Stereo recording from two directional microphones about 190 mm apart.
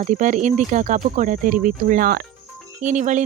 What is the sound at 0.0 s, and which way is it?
Speech, 40° right (ahead or behind).